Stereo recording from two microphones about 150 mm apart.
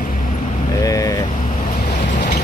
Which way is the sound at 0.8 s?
25° left (ahead or behind).